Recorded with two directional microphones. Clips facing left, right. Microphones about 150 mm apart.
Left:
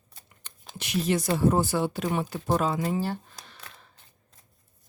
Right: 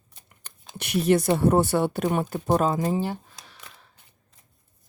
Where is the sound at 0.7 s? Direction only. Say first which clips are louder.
Right 5 dB; 60° right (ahead or behind); by 2.8 s 45° right (ahead or behind).